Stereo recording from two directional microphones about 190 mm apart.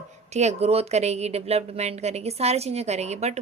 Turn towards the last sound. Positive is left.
turn(degrees=-35)  # may be behind; listen again after turning